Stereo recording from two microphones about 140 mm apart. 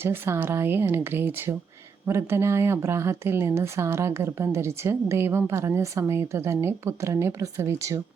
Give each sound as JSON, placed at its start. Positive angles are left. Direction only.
{"t": 0.0, "sound": "speech", "side_deg": -15}